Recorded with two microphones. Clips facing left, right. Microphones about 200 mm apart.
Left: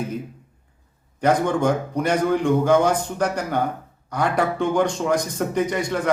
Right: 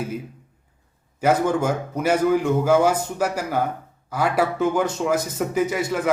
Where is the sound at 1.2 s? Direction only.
5° right (ahead or behind).